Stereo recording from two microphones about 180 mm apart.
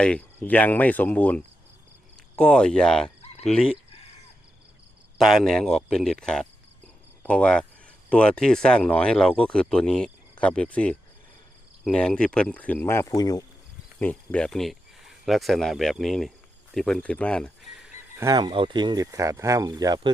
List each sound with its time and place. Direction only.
0.0 s speech: 5° left (ahead or behind)
5.1 s speech: centre (ahead or behind); by 13.4 s 20° left (ahead or behind)
14.0 s speech: 10° left (ahead or behind)
18.2 s speech: 20° right (ahead or behind)